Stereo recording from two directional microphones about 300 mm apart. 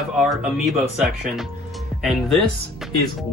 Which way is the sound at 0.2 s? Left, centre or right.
Centre.